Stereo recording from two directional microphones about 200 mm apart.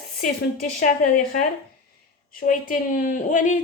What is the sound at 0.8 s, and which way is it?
Speech, 40° left (ahead or behind).